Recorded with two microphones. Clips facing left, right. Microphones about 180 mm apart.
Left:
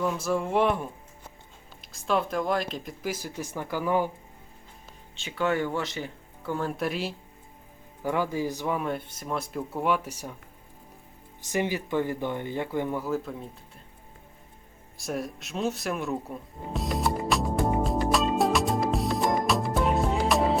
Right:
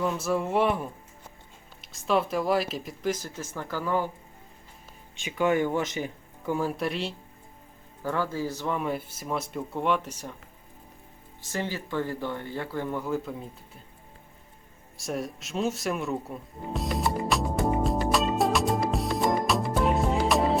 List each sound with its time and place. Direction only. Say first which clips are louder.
0.0 s speech: even; centre (ahead or behind)
3.0 s speech: right 3 dB; 10° left (ahead or behind)
5.1 s speech: right 2 dB; 15° right (ahead or behind); by 7.1 s centre (ahead or behind)
8.0 s speech: left 2 dB; 15° left (ahead or behind)
8.8 s speech: right 1 dB; 5° right (ahead or behind)
11.4 s speech: left 4 dB; 15° left (ahead or behind)
13.0 s speech: even; centre (ahead or behind)
14.9 s music: even; centre (ahead or behind)